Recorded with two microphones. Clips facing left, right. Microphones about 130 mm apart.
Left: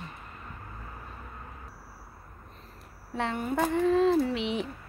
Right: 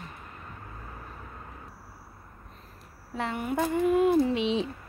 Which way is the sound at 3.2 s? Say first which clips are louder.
Even; 5° right (ahead or behind).